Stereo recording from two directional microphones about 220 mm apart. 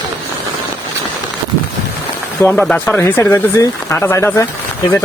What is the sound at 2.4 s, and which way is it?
Speech, 5° left (ahead or behind).